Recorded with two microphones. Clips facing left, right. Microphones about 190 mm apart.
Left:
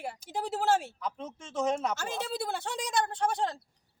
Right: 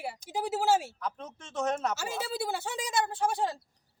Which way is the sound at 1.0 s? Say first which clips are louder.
Left 1 dB; 10° left (ahead or behind).